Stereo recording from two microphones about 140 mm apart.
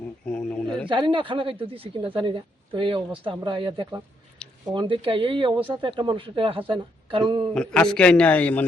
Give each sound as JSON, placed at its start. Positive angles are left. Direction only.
{"t": 0.3, "sound": "a sound", "side_deg": 10}
{"t": 0.9, "sound": "speech", "side_deg": -35}
{"t": 7.5, "sound": "a man's voice", "side_deg": 5}